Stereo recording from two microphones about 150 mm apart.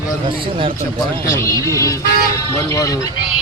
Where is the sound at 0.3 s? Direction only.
35° right (ahead or behind).